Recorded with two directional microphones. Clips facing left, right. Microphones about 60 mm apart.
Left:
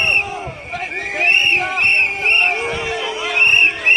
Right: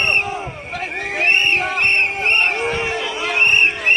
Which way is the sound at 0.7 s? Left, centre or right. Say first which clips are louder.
Left 1 dB; centre.